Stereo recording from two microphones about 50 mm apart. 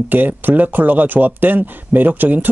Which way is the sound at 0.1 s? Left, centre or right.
Right.